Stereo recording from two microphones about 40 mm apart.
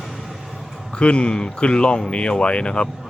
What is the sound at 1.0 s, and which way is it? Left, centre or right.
Speech, left.